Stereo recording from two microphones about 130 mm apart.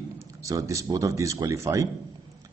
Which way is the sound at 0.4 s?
25° right (ahead or behind).